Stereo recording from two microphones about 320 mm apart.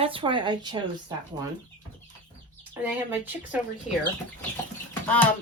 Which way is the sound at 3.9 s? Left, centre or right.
Left.